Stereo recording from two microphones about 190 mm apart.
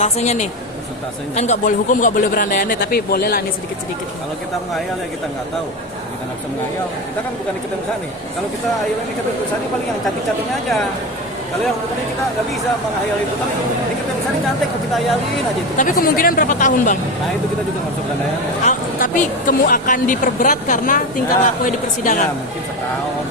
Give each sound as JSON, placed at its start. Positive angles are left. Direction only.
{"t": 0.0, "sound": "a woman's voice", "side_deg": 35}
{"t": 15.8, "sound": "speech", "side_deg": 45}
{"t": 18.6, "sound": "speech", "side_deg": 45}